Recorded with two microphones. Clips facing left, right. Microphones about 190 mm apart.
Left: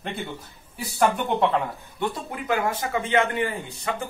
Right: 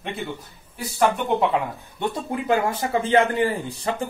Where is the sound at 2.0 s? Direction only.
25° right (ahead or behind).